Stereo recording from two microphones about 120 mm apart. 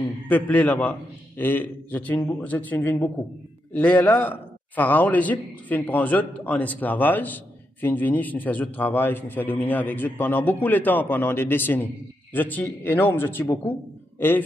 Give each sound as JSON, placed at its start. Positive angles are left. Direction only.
{"t": 0.3, "sound": "a man's voice", "side_deg": 15}